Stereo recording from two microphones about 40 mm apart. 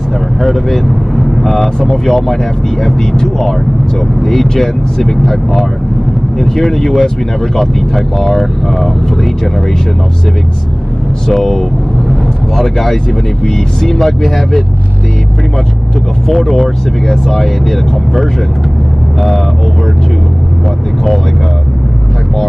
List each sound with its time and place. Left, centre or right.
0.4 s speech: centre
11.2 s speech: centre
16.3 s speech: centre